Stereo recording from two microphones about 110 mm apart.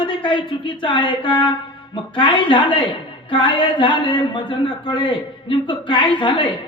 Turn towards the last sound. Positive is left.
turn(degrees=45)  # may be behind; listen again after turning